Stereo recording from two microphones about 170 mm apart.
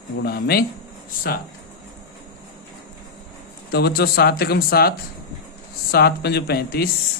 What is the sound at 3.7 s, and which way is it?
Speech, 70° left (ahead or behind).